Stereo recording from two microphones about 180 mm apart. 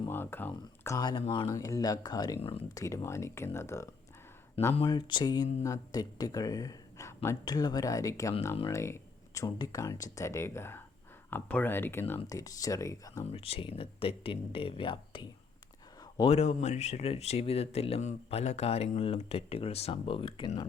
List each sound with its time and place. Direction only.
0.1 s speech: 10° left (ahead or behind)
4.7 s speech: 25° left (ahead or behind)
13.3 s speech: 30° left (ahead or behind)